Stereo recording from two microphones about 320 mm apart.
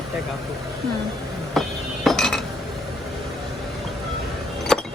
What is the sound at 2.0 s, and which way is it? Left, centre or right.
Cutlery, centre.